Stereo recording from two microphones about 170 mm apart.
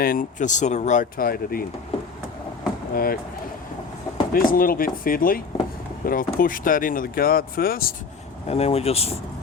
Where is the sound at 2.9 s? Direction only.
60° left (ahead or behind).